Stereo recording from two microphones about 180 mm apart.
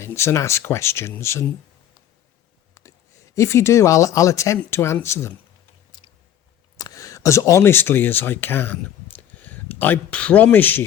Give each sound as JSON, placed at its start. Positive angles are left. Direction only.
{"t": 0.0, "sound": "speech", "side_deg": 15}
{"t": 2.8, "sound": "a sound", "side_deg": 20}
{"t": 3.3, "sound": "speech", "side_deg": 15}
{"t": 6.7, "sound": "speech", "side_deg": 20}